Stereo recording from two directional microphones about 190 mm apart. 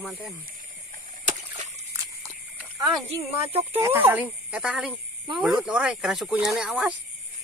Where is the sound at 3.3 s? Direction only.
35° right (ahead or behind).